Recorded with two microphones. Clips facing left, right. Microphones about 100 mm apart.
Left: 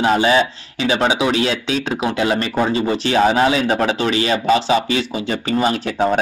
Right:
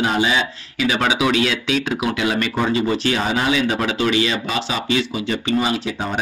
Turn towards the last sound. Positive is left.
turn(degrees=30)  # may be behind; listen again after turning